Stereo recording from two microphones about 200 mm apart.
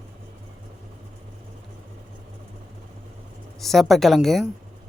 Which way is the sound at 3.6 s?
Centre (ahead or behind).